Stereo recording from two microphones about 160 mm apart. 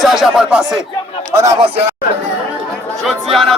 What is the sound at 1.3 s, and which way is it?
Speech, 20° right (ahead or behind).